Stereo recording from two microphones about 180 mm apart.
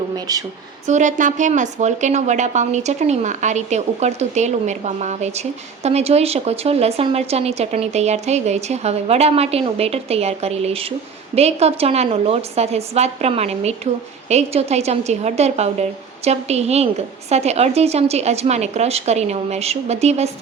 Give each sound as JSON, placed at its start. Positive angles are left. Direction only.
{"t": 0.3, "sound": "speech", "side_deg": -20}
{"t": 0.9, "sound": "a woman's voice", "side_deg": -45}